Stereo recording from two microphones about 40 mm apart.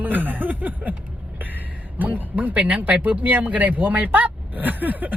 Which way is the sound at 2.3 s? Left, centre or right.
Right.